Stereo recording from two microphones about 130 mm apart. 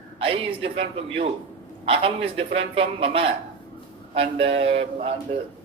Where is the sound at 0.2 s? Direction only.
45° right (ahead or behind).